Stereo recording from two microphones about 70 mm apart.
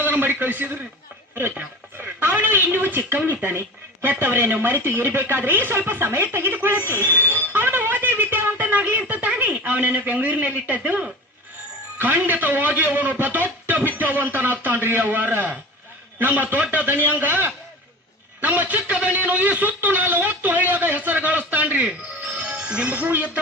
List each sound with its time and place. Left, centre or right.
0.0 s a man's voice: right